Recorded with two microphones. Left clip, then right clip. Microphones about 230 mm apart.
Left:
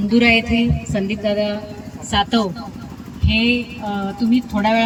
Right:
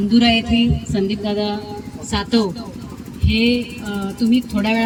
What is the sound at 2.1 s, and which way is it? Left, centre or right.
A woman's voice, centre.